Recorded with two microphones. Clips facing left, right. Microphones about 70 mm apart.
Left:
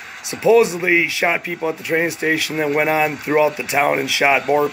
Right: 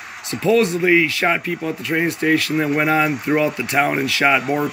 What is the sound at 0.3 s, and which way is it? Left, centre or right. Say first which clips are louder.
Speech: left 3 dB; centre.